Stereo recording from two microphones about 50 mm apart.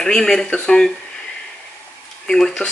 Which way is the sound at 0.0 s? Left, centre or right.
Centre.